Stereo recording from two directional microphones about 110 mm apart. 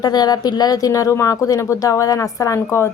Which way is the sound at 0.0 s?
40° left (ahead or behind).